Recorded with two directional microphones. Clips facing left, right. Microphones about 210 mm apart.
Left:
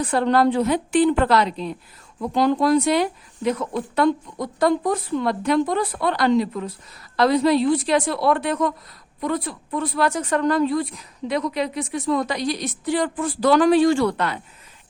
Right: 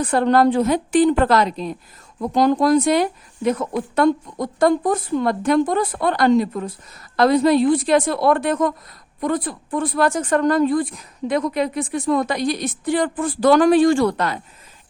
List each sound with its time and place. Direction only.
0.0 s speech: 50° right (ahead or behind)